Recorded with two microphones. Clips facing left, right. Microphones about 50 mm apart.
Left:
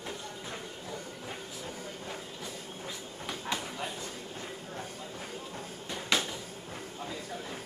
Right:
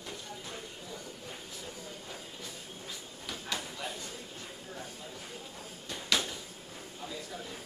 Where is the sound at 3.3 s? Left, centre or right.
Left.